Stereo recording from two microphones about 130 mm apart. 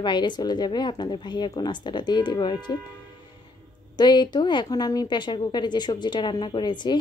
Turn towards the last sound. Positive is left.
turn(degrees=35)  # may be behind; listen again after turning